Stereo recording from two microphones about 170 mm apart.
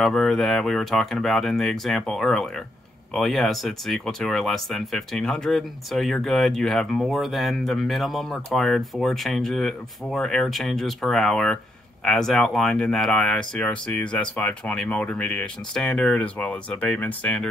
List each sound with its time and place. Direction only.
0.0 s speech: centre (ahead or behind)